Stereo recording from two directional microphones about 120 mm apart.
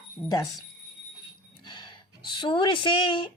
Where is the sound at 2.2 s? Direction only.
40° left (ahead or behind).